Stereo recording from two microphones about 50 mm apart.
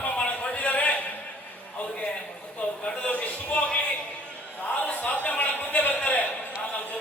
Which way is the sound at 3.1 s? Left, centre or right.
Left.